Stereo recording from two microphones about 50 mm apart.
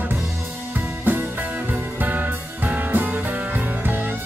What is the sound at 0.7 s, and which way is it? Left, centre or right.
Music, right.